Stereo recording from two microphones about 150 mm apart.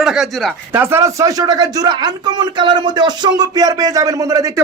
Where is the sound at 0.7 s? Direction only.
15° right (ahead or behind).